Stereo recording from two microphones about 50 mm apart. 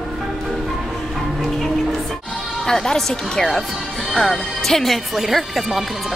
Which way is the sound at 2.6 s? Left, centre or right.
Centre.